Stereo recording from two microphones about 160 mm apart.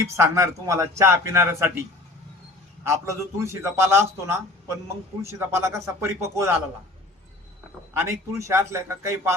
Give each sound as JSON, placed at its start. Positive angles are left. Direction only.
{"t": 0.0, "sound": "a man's voice", "side_deg": -20}
{"t": 2.8, "sound": "a man's voice", "side_deg": -20}
{"t": 7.9, "sound": "a man's voice", "side_deg": -20}